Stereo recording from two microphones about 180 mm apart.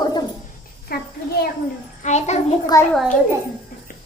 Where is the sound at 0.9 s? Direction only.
60° left (ahead or behind).